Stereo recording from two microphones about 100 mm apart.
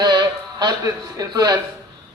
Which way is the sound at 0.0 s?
45° right (ahead or behind).